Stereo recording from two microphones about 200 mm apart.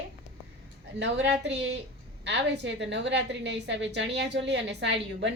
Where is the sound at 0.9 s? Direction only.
65° right (ahead or behind).